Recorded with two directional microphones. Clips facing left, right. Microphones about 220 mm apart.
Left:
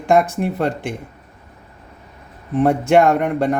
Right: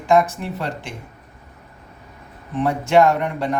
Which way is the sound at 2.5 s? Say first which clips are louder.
Left 3 dB; 55° left (ahead or behind).